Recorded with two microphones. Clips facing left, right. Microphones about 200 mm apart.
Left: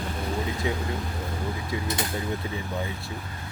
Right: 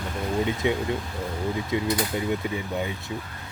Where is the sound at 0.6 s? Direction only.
25° right (ahead or behind).